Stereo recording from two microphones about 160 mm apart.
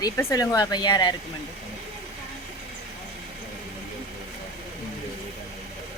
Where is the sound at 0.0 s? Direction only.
20° left (ahead or behind).